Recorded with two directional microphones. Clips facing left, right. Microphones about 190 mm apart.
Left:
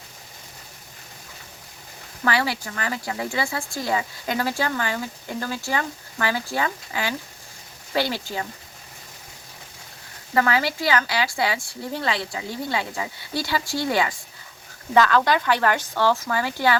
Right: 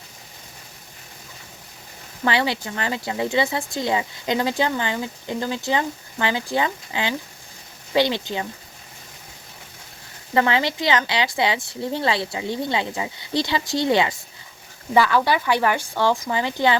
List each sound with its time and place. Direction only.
2.2 s speech: 25° right (ahead or behind)
10.3 s speech: 25° right (ahead or behind)
14.9 s speech: 10° right (ahead or behind)